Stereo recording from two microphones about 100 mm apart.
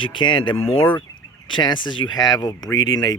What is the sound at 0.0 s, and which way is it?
Speech, 55° left (ahead or behind).